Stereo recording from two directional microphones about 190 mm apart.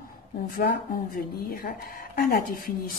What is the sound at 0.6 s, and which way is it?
A woman's voice, 50° left (ahead or behind).